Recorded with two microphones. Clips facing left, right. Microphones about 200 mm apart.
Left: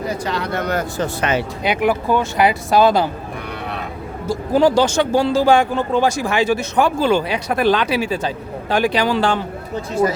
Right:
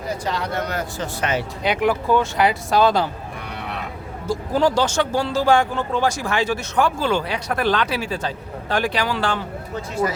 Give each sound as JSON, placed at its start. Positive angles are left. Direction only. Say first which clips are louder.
{"t": 0.1, "sound": "speech", "louder": "right 2 dB", "side_deg": 65}
{"t": 1.2, "sound": "speech", "louder": "left 2 dB", "side_deg": 75}
{"t": 1.6, "sound": "speech", "louder": "left 1 dB", "side_deg": 10}
{"t": 4.3, "sound": "speech", "louder": "left 4 dB", "side_deg": 10}